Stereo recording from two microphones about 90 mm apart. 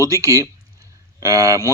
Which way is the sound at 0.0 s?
35° right (ahead or behind).